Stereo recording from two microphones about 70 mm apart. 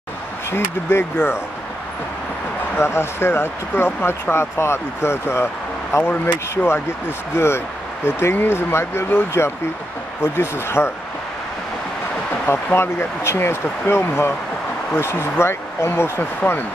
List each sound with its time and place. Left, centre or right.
0.5 s speech: left
2.8 s speech: left
12.7 s speech: left